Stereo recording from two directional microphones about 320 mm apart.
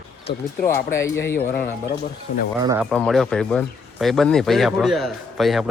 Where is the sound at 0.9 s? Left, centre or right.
Centre.